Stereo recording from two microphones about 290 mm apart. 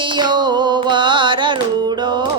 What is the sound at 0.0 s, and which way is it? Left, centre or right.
Music, centre.